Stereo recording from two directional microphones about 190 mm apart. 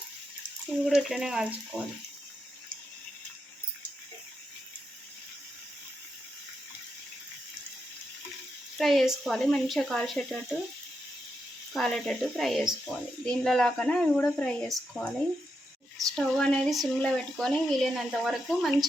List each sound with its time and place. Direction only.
0.9 s speech: centre (ahead or behind)
8.8 s speech: centre (ahead or behind)
11.7 s speech: centre (ahead or behind)
16.1 s speech: 5° left (ahead or behind)